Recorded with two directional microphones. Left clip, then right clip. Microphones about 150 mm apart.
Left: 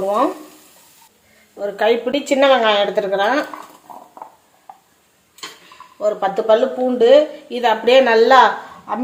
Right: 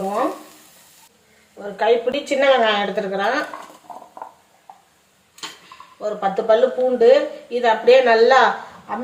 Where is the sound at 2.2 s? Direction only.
45° left (ahead or behind).